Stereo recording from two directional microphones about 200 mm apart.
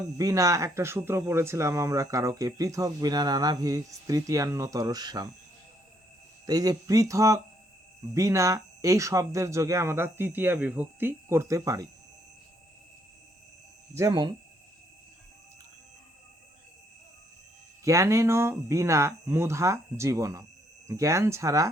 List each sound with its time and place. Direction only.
0.2 s speech: 15° right (ahead or behind)
6.4 s speech: 20° right (ahead or behind)
13.9 s speech: 15° right (ahead or behind)
17.8 s speech: 15° right (ahead or behind)